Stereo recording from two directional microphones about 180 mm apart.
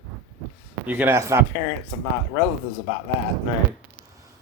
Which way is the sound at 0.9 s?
10° right (ahead or behind).